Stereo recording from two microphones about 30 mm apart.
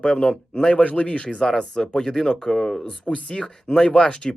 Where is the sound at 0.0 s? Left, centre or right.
Left.